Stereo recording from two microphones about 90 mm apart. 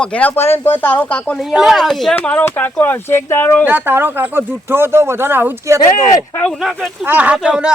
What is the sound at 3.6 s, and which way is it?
Speech, 20° right (ahead or behind).